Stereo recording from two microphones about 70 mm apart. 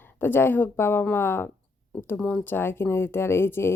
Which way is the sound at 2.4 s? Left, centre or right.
Left.